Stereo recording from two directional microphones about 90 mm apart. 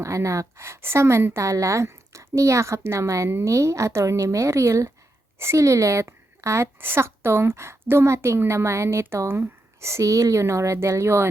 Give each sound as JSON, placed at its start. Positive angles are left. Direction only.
{"t": 0.0, "sound": "a woman's voice", "side_deg": -35}